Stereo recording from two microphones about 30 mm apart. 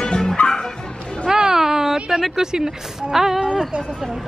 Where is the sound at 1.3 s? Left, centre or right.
Centre.